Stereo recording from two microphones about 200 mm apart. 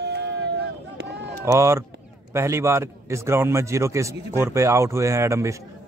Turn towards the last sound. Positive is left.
turn(degrees=-15)  # may be behind; listen again after turning